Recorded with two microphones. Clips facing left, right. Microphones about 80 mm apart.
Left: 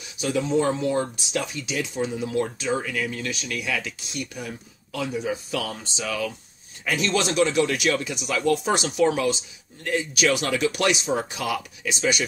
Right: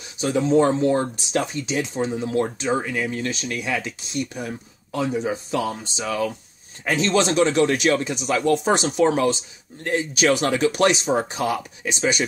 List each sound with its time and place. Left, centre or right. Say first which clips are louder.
0.2 s speech: right 5 dB; right